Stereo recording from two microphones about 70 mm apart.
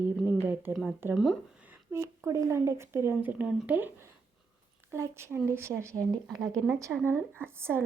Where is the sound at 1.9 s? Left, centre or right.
Right.